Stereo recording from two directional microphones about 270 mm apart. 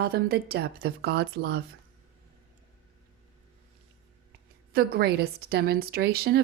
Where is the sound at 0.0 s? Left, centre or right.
Right.